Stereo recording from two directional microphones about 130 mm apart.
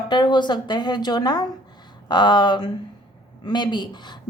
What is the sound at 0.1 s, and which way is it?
A woman's voice, 35° left (ahead or behind).